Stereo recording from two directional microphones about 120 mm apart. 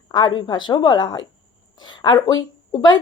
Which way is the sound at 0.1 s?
40° left (ahead or behind).